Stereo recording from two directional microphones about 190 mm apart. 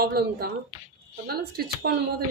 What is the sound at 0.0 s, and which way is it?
A woman's voice, 55° right (ahead or behind).